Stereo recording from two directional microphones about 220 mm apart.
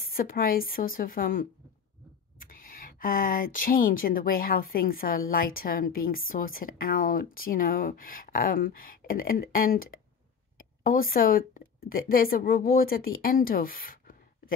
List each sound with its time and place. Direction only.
0.0 s speech: 40° left (ahead or behind)